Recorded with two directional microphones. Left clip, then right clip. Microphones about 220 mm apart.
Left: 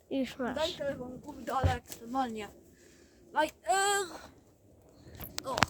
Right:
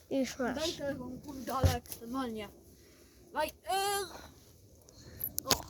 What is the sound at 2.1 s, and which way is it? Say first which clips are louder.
Speech: left 5 dB; 35° left (ahead or behind).